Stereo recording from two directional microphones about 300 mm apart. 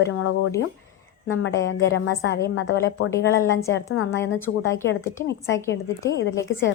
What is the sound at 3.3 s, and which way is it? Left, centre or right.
A woman's voice, centre.